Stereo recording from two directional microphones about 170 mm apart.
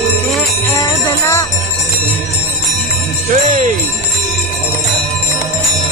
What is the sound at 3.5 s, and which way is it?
Jingle bell, 45° right (ahead or behind).